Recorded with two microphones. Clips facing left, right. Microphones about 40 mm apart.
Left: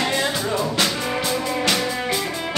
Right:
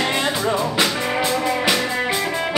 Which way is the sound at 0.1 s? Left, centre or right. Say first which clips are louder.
Right 2 dB; right.